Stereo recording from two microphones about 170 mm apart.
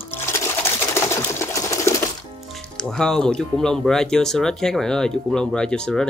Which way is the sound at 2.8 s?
5° left (ahead or behind).